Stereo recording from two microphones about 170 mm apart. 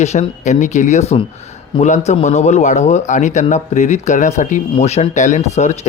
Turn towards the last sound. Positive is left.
turn(degrees=45)  # may be behind; listen again after turning